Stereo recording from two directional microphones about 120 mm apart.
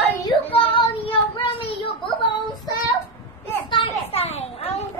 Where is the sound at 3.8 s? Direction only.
40° left (ahead or behind).